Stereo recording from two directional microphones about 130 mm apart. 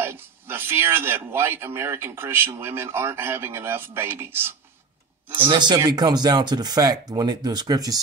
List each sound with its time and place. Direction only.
0.0 s speech: 15° right (ahead or behind)
5.5 s speech: 35° right (ahead or behind)